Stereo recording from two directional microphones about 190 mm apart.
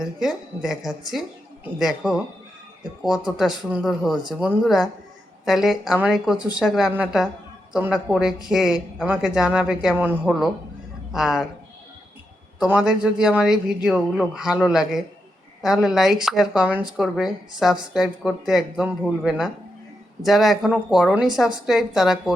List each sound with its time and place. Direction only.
0.0 s speech: centre (ahead or behind)
3.7 s a man's voice: centre (ahead or behind)
12.5 s speech: 5° right (ahead or behind)